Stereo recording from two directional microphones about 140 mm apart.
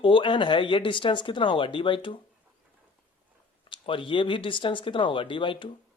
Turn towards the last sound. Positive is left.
turn(degrees=35)  # may be behind; listen again after turning